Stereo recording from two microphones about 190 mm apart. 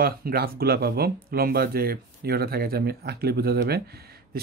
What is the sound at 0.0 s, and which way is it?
Speech, 50° right (ahead or behind).